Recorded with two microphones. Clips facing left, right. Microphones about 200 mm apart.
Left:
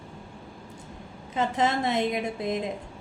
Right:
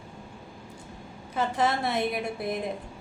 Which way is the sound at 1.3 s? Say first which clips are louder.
Left 1 dB; 20° left (ahead or behind).